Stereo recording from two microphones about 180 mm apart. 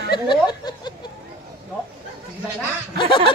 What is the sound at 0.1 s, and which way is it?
Speech, 25° left (ahead or behind).